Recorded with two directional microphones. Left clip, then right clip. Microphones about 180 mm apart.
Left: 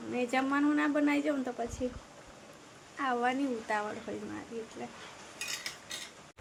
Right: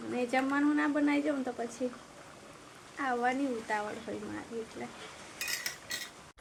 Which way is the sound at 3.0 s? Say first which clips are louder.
Even; 10° left (ahead or behind).